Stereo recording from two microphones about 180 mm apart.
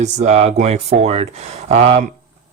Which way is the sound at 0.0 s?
40° right (ahead or behind).